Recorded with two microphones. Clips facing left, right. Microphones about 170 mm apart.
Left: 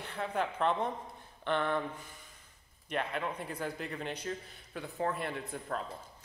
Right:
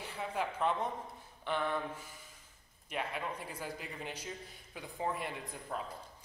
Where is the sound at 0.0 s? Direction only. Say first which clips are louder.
Left 3 dB; 10° right (ahead or behind).